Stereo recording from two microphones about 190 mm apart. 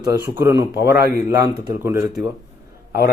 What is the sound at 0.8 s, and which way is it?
Speech, 55° left (ahead or behind).